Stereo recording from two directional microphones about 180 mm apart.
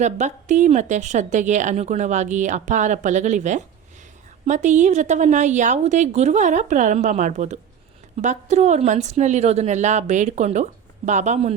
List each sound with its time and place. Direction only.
0.0 s a woman's voice: 40° right (ahead or behind)